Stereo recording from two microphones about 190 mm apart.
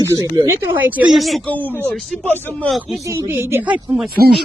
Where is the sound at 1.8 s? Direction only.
10° left (ahead or behind).